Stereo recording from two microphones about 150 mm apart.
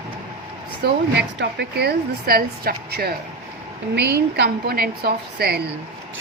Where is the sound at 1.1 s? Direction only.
90° right.